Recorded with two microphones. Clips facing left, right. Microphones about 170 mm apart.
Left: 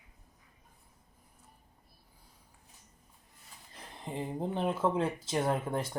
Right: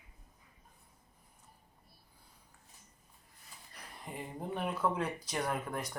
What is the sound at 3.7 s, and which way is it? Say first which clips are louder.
Speech: left 6 dB; 25° left (ahead or behind).